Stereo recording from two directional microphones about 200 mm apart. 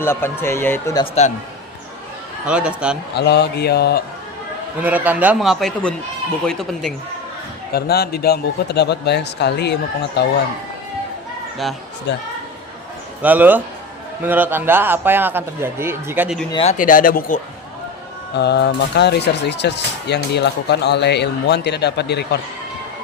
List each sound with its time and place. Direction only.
0.0 s speech: 10° left (ahead or behind)
2.5 s speech: 5° right (ahead or behind)
3.2 s speech: 55° left (ahead or behind)
4.8 s speech: 10° right (ahead or behind)
7.7 s speech: 50° left (ahead or behind)
12.1 s speech: 65° left (ahead or behind)
13.2 s speech: 10° right (ahead or behind)
16.5 s speech: 25° left (ahead or behind)
16.7 s speech: 40° left (ahead or behind)
18.3 s speech: 55° left (ahead or behind)